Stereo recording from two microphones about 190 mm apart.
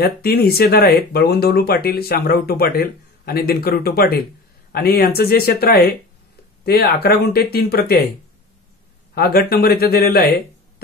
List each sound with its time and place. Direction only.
0.0 s speech: 55° left (ahead or behind)
9.1 s speech: 55° left (ahead or behind)